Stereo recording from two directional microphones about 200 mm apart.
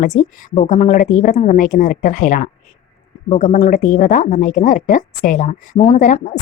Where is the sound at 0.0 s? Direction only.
40° left (ahead or behind).